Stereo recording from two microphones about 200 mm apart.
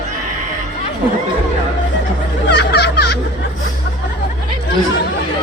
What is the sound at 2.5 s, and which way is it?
Music, 55° left (ahead or behind).